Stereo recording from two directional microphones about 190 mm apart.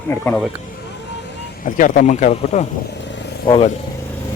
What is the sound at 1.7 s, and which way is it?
Speech, 45° left (ahead or behind).